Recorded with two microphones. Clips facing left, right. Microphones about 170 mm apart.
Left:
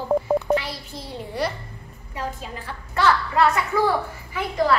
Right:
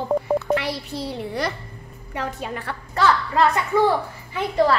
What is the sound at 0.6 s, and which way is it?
A child's voice, 70° right (ahead or behind).